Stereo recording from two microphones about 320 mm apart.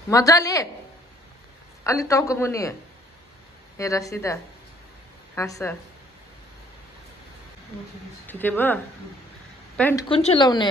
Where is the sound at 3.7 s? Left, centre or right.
Centre.